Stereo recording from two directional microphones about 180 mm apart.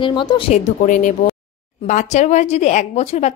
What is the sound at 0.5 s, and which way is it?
A woman's voice, 40° left (ahead or behind).